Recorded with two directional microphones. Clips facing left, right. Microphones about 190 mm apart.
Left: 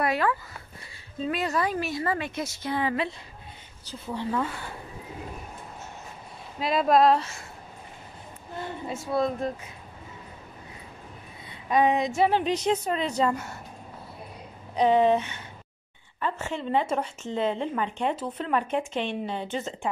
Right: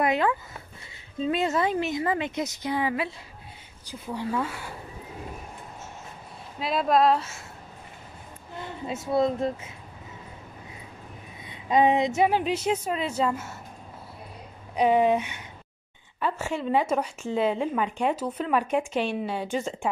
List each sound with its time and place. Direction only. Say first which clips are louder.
0.0 s a woman's voice: right 2 dB; 20° right (ahead or behind)
6.6 s speech: left 1 dB; centre (ahead or behind)
8.8 s a woman's voice: right 3 dB; 20° right (ahead or behind)
11.4 s speech: right 2 dB; 20° right (ahead or behind)
12.3 s a woman's voice: left 1 dB; 5° right (ahead or behind)
14.8 s a woman's voice: even; 10° right (ahead or behind)